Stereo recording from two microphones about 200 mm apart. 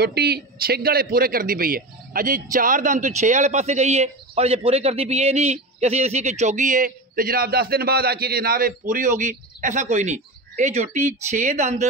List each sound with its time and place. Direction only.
0.0 s a man's voice: 50° right (ahead or behind); by 11.8 s 35° right (ahead or behind)